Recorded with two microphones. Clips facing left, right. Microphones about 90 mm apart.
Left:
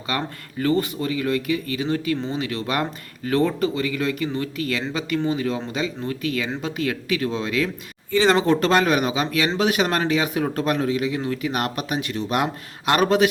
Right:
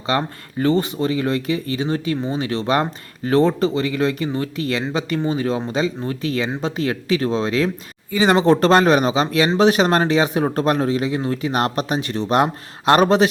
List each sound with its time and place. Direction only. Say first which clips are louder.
0.1 s speech: right 6 dB; 25° right (ahead or behind)
8.1 s speech: right 1 dB; 15° right (ahead or behind)
8.4 s speech: right 5 dB; 35° right (ahead or behind)